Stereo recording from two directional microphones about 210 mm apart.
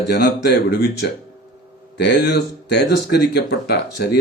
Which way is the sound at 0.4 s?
55° left (ahead or behind).